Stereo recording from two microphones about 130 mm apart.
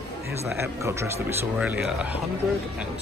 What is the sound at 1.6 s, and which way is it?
Speech, 5° right (ahead or behind).